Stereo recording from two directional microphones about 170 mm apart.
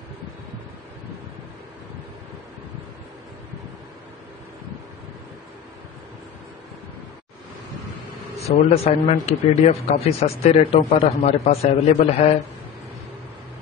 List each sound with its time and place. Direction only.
8.4 s speech: 40° left (ahead or behind)